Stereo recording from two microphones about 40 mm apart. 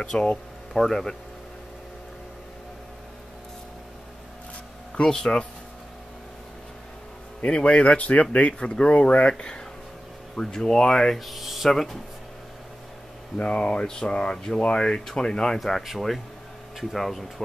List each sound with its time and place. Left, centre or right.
0.0 s speech: left
0.7 s speech: centre
5.0 s speech: centre
7.4 s speech: left
8.5 s speech: left
11.1 s speech: centre
13.4 s speech: left
16.9 s speech: centre